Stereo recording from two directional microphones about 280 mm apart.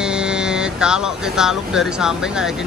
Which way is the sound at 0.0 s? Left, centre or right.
Centre.